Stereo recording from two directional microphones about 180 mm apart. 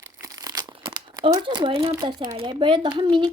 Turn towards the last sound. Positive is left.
turn(degrees=-25)  # may be behind; listen again after turning